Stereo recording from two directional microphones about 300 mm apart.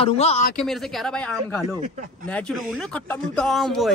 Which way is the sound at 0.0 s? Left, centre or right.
Centre.